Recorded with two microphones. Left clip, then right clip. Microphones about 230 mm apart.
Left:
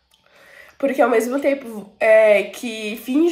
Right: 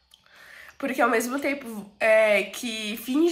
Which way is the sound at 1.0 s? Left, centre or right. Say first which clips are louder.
Left 5 dB; right.